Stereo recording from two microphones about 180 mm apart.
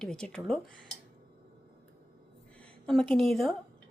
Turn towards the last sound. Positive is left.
turn(degrees=0)  # may be behind; listen again after turning